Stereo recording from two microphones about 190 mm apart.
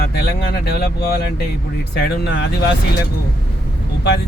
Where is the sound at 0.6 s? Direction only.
50° left (ahead or behind).